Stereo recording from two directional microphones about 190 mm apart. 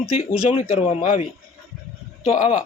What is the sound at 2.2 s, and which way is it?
Speech, 35° left (ahead or behind).